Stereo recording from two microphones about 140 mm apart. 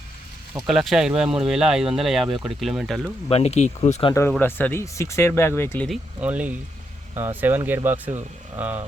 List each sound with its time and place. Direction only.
0.7 s speech: 5° right (ahead or behind)
3.2 s speech: 45° left (ahead or behind)
4.3 s speech: 15° left (ahead or behind)
6.1 s speech: 10° right (ahead or behind)